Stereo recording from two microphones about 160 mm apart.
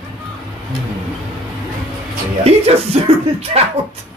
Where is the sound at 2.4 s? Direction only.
40° right (ahead or behind).